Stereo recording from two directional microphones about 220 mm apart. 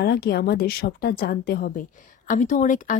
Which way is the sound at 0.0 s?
45° left (ahead or behind).